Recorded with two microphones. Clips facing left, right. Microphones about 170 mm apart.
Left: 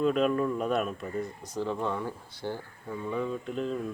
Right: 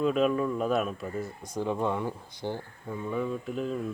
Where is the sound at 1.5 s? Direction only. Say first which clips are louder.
Right 2 dB; 15° right (ahead or behind).